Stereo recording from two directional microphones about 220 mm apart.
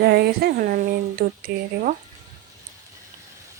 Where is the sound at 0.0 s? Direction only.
45° right (ahead or behind).